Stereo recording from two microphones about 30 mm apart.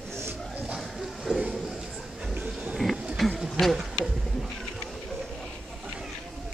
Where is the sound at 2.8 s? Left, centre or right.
Centre.